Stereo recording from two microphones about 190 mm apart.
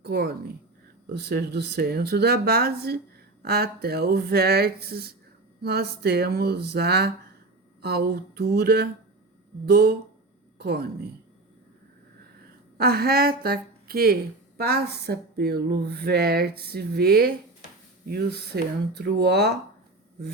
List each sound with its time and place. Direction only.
0.0 s a woman's voice: 50° right (ahead or behind)
12.7 s a woman's voice: 55° right (ahead or behind)